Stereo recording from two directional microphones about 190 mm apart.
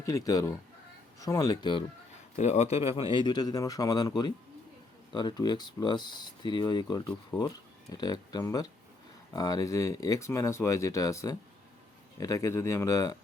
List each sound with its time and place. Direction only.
0.0 s a man's voice: 15° left (ahead or behind)
2.3 s a man's voice: 35° left (ahead or behind); by 13.1 s 15° left (ahead or behind)